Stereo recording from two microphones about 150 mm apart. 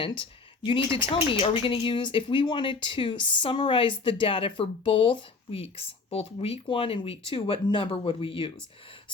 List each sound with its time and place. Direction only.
0.0 s speech: 35° left (ahead or behind)